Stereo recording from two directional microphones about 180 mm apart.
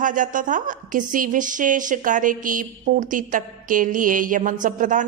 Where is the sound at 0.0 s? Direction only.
45° right (ahead or behind).